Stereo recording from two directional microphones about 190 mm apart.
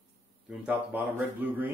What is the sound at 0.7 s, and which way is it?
Speech, 10° right (ahead or behind).